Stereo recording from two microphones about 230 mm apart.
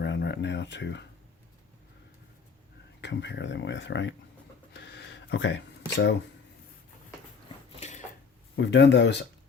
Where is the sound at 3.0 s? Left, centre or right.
Left.